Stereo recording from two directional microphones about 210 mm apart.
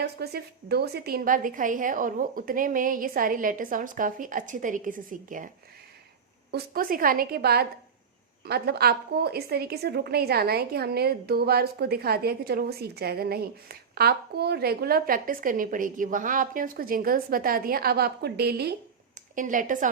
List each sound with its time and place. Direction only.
0.0 s a woman's voice: 50° right (ahead or behind)
6.5 s a woman's voice: 45° right (ahead or behind)
19.4 s a woman's voice: 40° right (ahead or behind)